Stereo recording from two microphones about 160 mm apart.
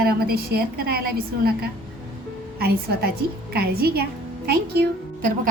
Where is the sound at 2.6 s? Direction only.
80° right.